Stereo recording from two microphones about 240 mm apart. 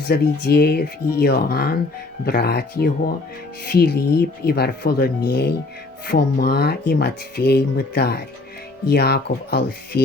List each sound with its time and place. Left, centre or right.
0.1 s speech: left